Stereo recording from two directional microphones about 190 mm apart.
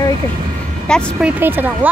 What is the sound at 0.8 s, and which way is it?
Speech, 5° left (ahead or behind).